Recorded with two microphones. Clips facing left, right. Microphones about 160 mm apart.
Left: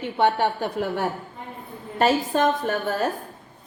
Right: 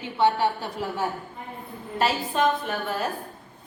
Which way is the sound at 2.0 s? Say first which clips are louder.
Left 4 dB; 45° left (ahead or behind).